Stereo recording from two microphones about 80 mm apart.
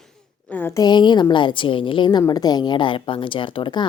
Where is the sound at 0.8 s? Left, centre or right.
Left.